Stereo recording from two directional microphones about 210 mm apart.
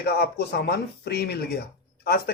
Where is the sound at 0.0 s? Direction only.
50° left (ahead or behind).